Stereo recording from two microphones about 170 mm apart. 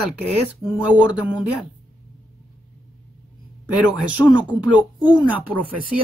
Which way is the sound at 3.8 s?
10° right (ahead or behind).